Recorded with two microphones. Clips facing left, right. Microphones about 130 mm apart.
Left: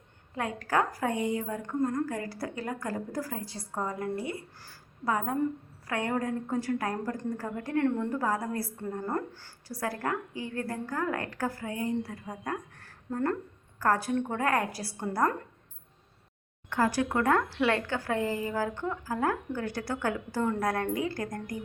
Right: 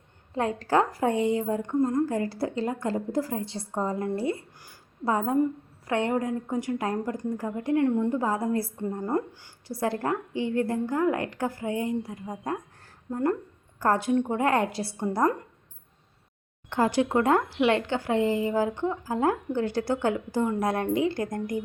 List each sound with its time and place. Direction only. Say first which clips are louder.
0.3 s a woman's voice: right 5 dB; 30° right (ahead or behind)
16.6 s a woman's voice: right 3 dB; 25° right (ahead or behind)